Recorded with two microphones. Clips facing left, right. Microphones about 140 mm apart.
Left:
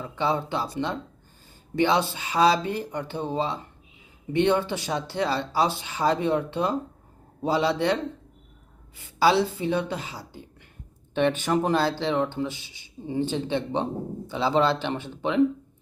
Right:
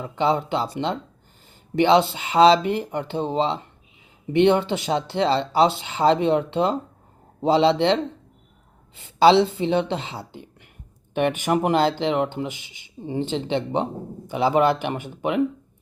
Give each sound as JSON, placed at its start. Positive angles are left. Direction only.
{"t": 0.0, "sound": "a woman's voice", "side_deg": -20}